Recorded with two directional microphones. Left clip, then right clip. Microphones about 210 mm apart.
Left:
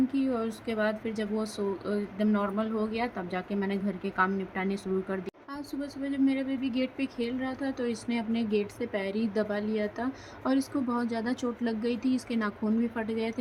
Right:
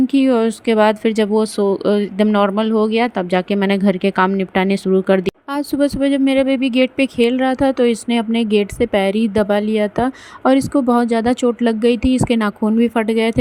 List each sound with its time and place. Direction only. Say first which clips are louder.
0.1 s speech: right 16 dB; 40° right (ahead or behind)